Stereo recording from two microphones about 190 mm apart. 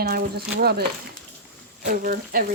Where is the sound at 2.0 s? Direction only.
45° right (ahead or behind).